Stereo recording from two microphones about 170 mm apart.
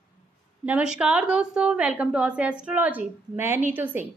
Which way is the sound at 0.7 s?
5° right (ahead or behind).